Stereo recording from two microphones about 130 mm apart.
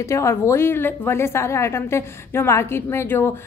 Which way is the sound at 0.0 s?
20° left (ahead or behind).